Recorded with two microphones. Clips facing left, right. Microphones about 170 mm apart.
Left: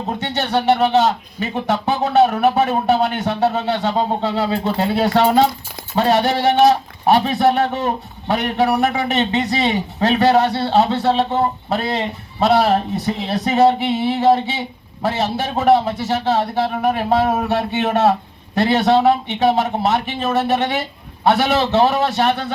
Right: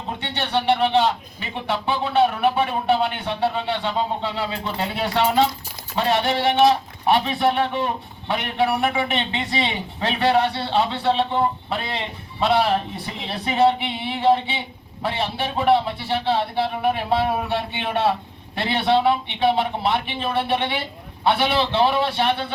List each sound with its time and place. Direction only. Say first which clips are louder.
0.1 s speech: left 4 dB; 40° left (ahead or behind)